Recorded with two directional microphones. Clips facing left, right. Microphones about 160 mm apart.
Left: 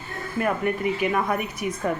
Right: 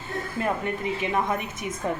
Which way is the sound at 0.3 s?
25° right (ahead or behind).